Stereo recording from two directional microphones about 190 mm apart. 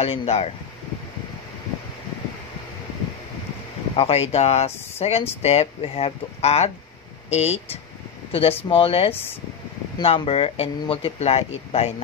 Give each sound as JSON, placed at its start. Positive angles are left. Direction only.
{"t": 0.0, "sound": "speech", "side_deg": 30}
{"t": 3.9, "sound": "speech", "side_deg": 30}